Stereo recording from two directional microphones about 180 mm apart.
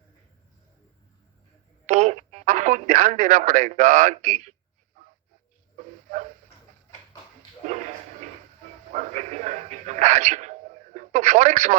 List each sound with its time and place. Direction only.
1.9 s speech: 40° right (ahead or behind)
8.9 s a sound: 40° right (ahead or behind)
10.9 s radio: 40° right (ahead or behind)